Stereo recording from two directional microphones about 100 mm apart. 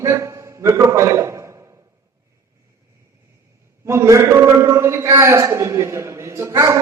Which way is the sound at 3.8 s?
30° right (ahead or behind).